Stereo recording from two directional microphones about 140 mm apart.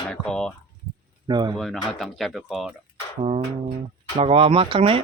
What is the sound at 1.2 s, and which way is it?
Speech, 30° right (ahead or behind).